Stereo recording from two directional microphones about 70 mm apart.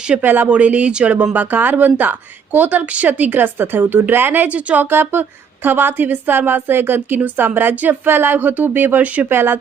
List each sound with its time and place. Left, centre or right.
0.2 s speech: right
9.3 s speech: right